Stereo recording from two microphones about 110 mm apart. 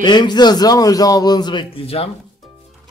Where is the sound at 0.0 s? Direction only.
40° left (ahead or behind); by 2.0 s 60° left (ahead or behind).